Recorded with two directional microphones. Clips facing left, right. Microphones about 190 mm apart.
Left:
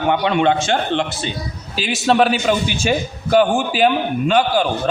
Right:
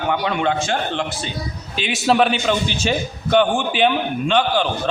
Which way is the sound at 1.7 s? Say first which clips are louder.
Left 1 dB; centre (ahead or behind).